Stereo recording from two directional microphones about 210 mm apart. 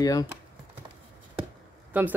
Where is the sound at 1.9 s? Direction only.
10° right (ahead or behind).